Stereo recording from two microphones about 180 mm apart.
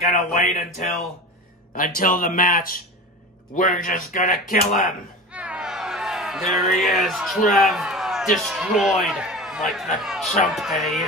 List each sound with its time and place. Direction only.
0.0 s speech: 40° left (ahead or behind)
4.8 s speech: 5° right (ahead or behind)